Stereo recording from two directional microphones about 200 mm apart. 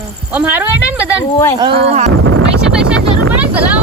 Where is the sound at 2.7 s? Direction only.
5° right (ahead or behind).